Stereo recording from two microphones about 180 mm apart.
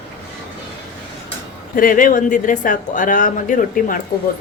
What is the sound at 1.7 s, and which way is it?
Speech, 50° left (ahead or behind).